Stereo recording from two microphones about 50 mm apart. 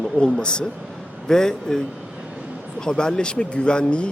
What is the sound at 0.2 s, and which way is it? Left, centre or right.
A man's voice, centre.